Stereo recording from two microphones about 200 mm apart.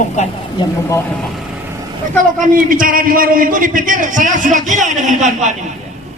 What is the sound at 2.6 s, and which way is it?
A man's voice, 45° right (ahead or behind).